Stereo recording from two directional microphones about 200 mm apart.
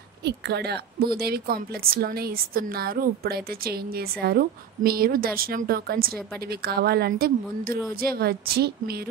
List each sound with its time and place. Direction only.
0.2 s a woman's voice: 55° right (ahead or behind)